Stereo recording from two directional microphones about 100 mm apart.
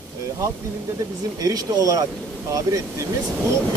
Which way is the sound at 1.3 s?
35° right (ahead or behind).